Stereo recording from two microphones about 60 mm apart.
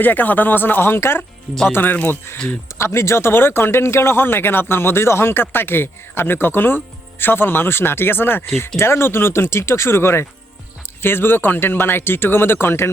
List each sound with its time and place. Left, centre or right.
0.0 s speech: left
2.5 s speech: left